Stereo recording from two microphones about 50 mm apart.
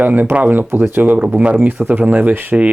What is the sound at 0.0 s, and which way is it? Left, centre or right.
Speech, right.